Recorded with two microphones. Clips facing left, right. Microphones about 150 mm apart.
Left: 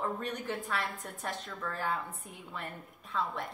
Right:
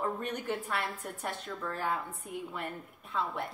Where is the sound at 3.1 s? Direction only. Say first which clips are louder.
Even; 10° right (ahead or behind).